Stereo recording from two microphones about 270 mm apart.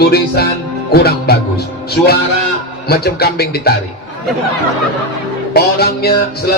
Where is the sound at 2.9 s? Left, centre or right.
Left.